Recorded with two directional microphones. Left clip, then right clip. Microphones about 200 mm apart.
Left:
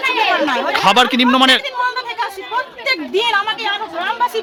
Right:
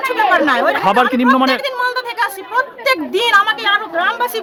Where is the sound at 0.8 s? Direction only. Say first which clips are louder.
Left 1 dB; 10° left (ahead or behind).